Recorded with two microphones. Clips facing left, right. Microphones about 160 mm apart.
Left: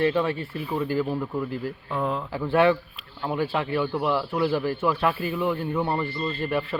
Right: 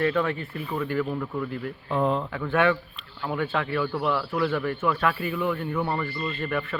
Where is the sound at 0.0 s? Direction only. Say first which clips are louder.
Left 1 dB; 30° left (ahead or behind).